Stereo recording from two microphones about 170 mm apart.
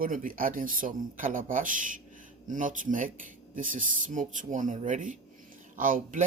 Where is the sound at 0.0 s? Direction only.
55° right (ahead or behind).